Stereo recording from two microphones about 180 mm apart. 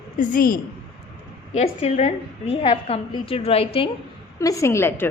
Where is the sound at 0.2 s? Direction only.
50° left (ahead or behind).